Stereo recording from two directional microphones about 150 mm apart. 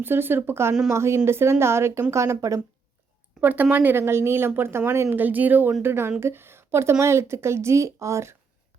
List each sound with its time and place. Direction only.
0.0 s speech: 15° right (ahead or behind)